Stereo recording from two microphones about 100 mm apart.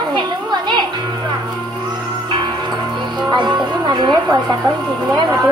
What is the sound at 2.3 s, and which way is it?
Music, 50° right (ahead or behind).